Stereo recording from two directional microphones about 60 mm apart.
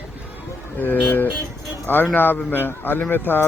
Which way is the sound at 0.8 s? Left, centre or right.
Left.